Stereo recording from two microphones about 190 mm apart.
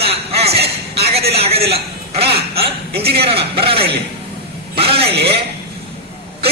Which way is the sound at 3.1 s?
30° right (ahead or behind).